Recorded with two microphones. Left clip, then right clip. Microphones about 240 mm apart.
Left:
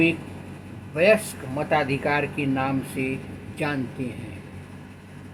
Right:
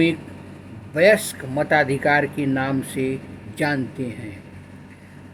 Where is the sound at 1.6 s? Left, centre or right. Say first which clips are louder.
Right 5 dB; right.